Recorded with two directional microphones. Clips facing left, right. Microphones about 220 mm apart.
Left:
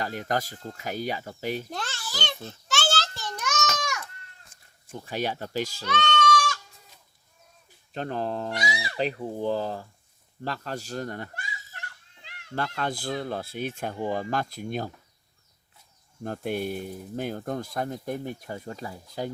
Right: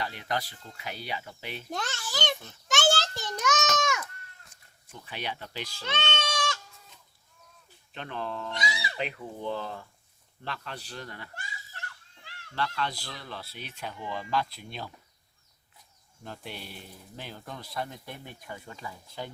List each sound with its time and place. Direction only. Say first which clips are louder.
0.0 s speech: left 4 dB; 45° left (ahead or behind)
2.1 s a sound: right 4 dB; 15° right (ahead or behind)
4.5 s cat: left 1 dB; 50° left (ahead or behind)
4.9 s speech: left 8 dB; 45° left (ahead or behind)
5.8 s goat: left 6 dB; 25° right (ahead or behind)
7.9 s speech: left 6 dB; 40° left (ahead or behind)
9.0 s speech: left 9 dB; 35° left (ahead or behind)
12.5 s speech: left 3 dB; 45° left (ahead or behind)
16.2 s speech: left 12 dB; 50° left (ahead or behind)